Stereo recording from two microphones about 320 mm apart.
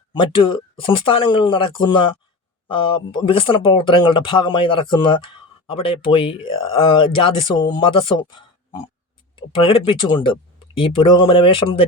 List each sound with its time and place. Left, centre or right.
0.1 s speech: centre
9.3 s speech: centre